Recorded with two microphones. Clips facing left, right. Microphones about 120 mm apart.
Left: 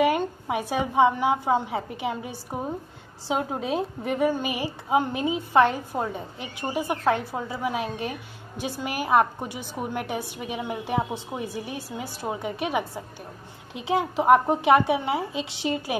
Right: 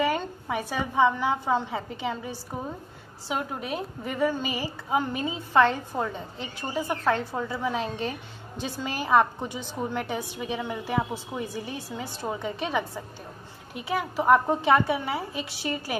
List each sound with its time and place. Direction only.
0.0 s a woman's voice: 15° left (ahead or behind)
3.3 s a woman's voice: 30° left (ahead or behind)
4.0 s a woman's voice: 15° left (ahead or behind)